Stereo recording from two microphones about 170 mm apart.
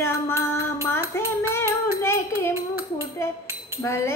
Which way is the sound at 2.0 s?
15° left (ahead or behind).